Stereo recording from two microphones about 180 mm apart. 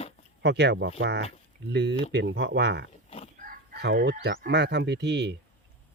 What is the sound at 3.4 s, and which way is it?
Speech, 60° right (ahead or behind).